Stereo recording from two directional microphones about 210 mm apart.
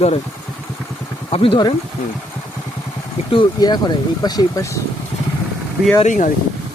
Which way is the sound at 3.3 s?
20° left (ahead or behind).